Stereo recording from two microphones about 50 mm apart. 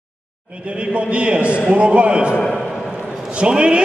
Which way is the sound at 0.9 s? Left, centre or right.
Right.